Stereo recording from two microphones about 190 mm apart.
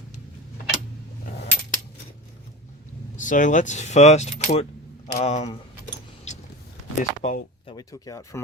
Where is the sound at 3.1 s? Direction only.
40° left (ahead or behind).